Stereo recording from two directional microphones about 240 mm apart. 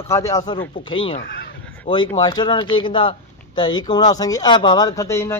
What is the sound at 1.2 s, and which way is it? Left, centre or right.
Speech, left.